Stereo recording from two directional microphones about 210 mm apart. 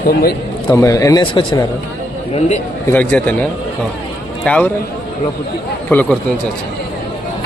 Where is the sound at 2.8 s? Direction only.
10° left (ahead or behind).